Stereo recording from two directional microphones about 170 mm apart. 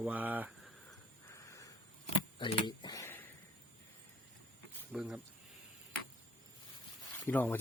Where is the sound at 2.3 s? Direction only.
30° left (ahead or behind).